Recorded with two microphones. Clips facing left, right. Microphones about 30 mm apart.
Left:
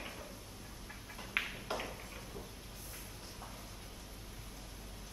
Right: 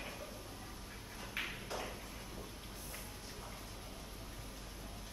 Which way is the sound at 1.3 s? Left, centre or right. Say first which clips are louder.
Left 4 dB; left.